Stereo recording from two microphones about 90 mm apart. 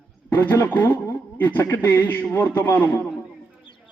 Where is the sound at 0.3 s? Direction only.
25° left (ahead or behind).